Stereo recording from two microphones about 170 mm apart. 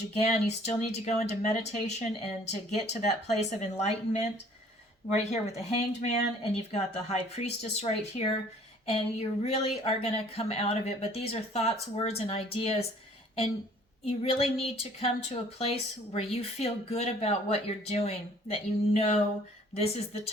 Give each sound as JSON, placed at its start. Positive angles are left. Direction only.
{"t": 0.2, "sound": "speech", "side_deg": 40}
{"t": 14.0, "sound": "speech", "side_deg": 35}